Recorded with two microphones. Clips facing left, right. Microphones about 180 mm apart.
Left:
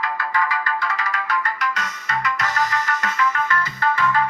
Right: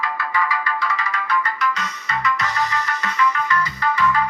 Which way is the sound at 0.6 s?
45° left (ahead or behind).